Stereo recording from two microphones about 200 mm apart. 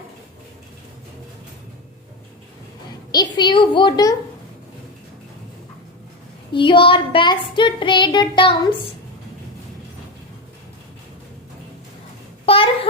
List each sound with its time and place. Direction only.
3.3 s speech: 25° left (ahead or behind)
6.5 s speech: 25° left (ahead or behind)
12.5 s babbling: 30° left (ahead or behind)